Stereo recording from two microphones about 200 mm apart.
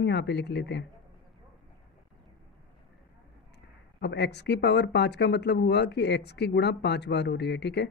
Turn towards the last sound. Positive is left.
turn(degrees=60)  # may be behind; listen again after turning